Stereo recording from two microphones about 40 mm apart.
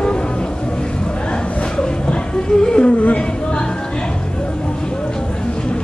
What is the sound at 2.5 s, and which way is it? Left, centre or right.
Music, centre.